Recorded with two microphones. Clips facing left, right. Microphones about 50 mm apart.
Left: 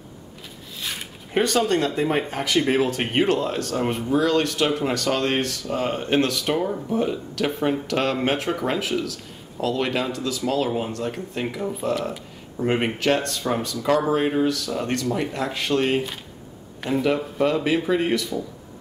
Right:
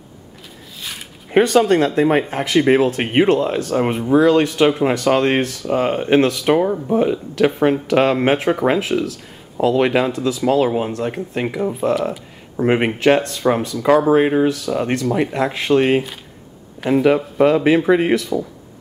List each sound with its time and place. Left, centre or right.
0.7 s a sound: centre
1.4 s speech: centre
2.0 s speech: right
11.9 s speech: centre
12.5 s speech: right; by 17.1 s centre
17.1 s speech: centre